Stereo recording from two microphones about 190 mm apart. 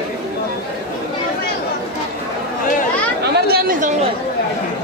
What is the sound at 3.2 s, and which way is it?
Chatter, 55° right (ahead or behind).